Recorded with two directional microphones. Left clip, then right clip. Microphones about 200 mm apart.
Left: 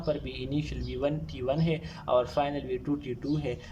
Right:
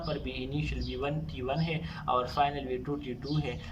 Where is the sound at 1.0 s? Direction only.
25° left (ahead or behind).